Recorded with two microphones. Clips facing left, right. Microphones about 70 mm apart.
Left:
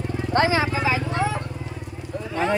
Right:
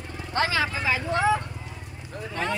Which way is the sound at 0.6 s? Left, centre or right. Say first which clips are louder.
Left 3 dB; centre.